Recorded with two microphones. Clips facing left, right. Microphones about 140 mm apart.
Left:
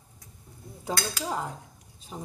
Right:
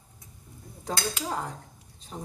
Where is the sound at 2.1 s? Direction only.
10° left (ahead or behind).